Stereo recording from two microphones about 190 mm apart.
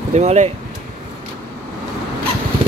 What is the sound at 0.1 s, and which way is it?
Speech, 35° right (ahead or behind).